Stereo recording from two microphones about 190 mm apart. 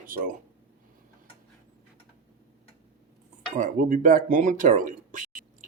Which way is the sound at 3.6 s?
45° right (ahead or behind).